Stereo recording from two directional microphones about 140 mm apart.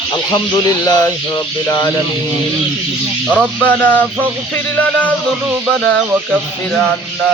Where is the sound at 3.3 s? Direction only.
10° left (ahead or behind).